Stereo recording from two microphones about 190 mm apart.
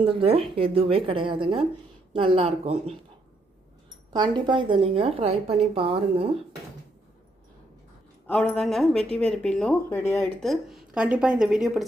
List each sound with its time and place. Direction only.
0.0 s speech: 30° right (ahead or behind)
4.1 s speech: 25° right (ahead or behind)
8.3 s a woman's voice: 5° left (ahead or behind)